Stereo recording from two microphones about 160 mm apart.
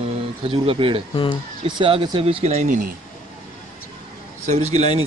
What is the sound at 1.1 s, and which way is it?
Speech, 30° left (ahead or behind).